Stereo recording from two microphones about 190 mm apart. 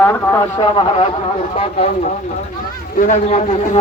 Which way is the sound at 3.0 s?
40° left (ahead or behind).